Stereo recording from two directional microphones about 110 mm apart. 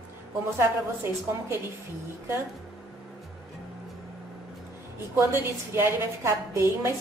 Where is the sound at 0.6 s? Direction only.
20° right (ahead or behind).